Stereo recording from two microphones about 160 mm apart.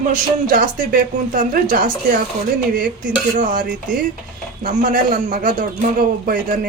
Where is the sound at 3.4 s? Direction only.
55° right (ahead or behind).